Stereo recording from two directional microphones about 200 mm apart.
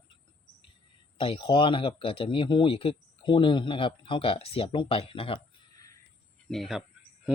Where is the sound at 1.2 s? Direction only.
25° left (ahead or behind).